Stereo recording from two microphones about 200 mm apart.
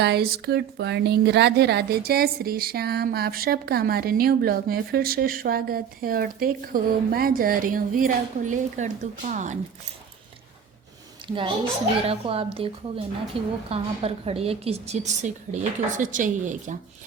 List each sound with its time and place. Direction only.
0.0 s a woman's voice: 55° right (ahead or behind); by 9.6 s 40° right (ahead or behind)
11.3 s a woman's voice: 25° right (ahead or behind)